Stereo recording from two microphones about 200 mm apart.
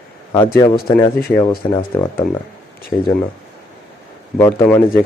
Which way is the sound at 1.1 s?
50° left (ahead or behind).